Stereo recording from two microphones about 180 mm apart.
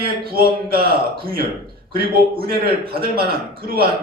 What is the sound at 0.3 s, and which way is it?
Speech, 55° right (ahead or behind).